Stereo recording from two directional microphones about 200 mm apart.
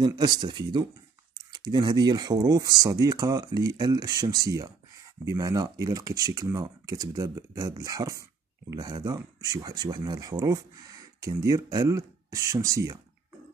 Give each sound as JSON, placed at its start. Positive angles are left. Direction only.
{"t": 0.0, "sound": "speech", "side_deg": -20}